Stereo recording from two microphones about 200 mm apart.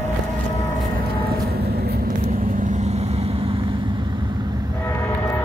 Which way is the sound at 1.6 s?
55° right (ahead or behind).